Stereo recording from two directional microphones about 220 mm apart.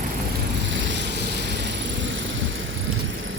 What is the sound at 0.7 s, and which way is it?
Vehicle, 55° right (ahead or behind).